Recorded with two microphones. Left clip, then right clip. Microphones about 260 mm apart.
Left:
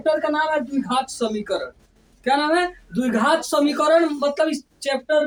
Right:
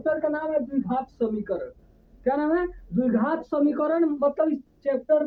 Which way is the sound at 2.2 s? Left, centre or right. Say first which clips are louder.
Left 5 dB; right.